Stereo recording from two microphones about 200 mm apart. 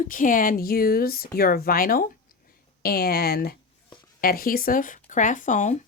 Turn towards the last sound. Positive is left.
turn(degrees=35)  # may be behind; listen again after turning